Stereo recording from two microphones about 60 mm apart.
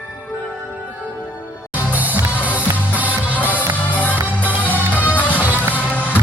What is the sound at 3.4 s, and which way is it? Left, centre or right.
Music, left.